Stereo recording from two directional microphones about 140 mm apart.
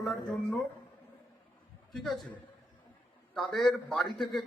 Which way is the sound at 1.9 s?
5° left (ahead or behind).